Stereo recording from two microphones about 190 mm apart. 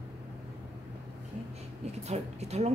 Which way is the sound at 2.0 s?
35° right (ahead or behind).